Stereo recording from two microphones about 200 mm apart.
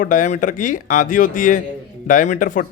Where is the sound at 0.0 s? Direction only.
40° left (ahead or behind).